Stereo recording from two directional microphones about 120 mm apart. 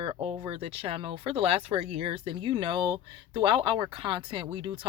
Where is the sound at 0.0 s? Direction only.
50° right (ahead or behind).